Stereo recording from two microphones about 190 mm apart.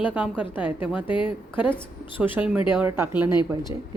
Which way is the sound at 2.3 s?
5° right (ahead or behind).